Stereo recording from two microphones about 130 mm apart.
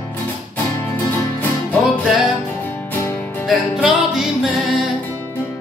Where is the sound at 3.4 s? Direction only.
5° right (ahead or behind).